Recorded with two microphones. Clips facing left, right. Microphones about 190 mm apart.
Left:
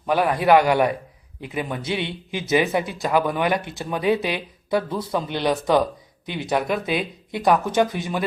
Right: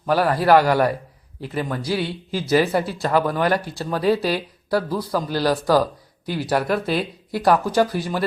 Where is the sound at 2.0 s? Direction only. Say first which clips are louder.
Right 3 dB; 20° left (ahead or behind).